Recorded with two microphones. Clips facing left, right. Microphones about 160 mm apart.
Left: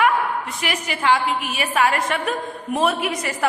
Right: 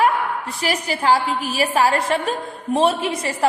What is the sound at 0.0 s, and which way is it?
A woman's voice, 35° right (ahead or behind).